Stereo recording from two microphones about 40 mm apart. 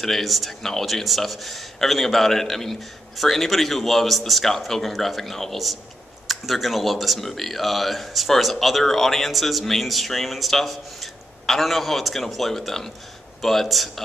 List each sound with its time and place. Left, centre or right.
0.0 s speech: centre